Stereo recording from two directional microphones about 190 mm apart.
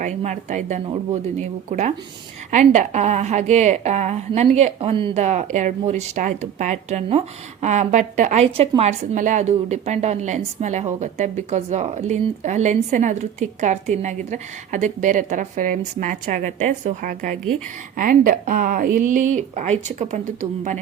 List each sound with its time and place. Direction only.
0.0 s a woman's voice: 40° right (ahead or behind)